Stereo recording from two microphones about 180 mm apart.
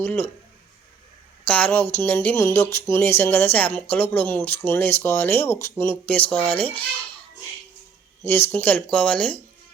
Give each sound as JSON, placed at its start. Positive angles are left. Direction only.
{"t": 0.0, "sound": "speech", "side_deg": 15}
{"t": 1.5, "sound": "speech", "side_deg": 10}
{"t": 8.3, "sound": "speech", "side_deg": 10}